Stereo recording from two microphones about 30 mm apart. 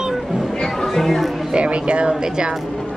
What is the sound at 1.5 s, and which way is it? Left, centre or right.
Speech, right.